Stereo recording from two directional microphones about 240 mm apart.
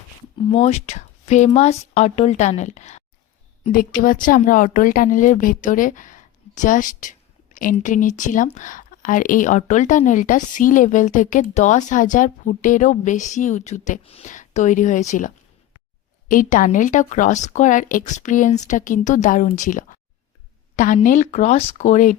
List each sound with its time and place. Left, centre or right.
0.5 s a woman's voice: left
16.3 s a woman's voice: left